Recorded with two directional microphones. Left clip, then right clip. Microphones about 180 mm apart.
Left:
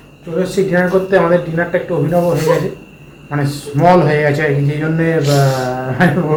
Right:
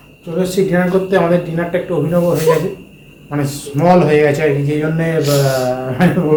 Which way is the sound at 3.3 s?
Centre (ahead or behind).